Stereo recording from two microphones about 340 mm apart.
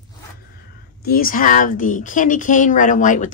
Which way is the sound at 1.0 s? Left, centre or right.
Left.